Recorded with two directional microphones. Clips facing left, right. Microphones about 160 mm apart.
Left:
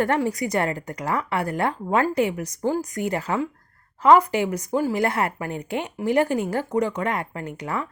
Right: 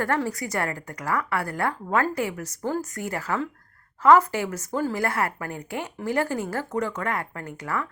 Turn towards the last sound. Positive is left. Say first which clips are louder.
# left 2 dB
turn(degrees=20)  # may be behind; listen again after turning